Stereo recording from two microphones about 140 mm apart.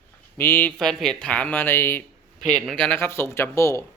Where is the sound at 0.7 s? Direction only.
5° left (ahead or behind).